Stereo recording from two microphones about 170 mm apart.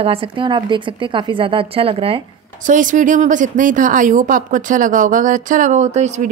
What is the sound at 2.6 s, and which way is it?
Speech, 50° right (ahead or behind).